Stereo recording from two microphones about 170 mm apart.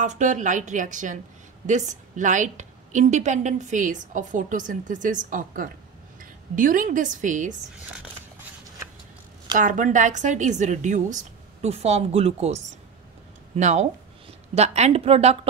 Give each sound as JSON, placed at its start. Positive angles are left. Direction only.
{"t": 0.0, "sound": "a woman's voice", "side_deg": -45}
{"t": 9.6, "sound": "a woman's voice", "side_deg": -50}